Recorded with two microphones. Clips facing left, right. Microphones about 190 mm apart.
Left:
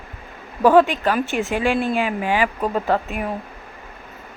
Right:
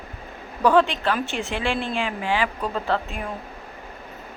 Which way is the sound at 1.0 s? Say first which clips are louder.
Left 4 dB; 10° left (ahead or behind).